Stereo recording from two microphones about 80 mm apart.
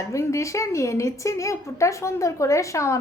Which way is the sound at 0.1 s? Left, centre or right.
Left.